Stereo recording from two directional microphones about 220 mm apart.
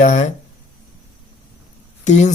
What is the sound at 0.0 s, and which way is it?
Speech, 35° left (ahead or behind).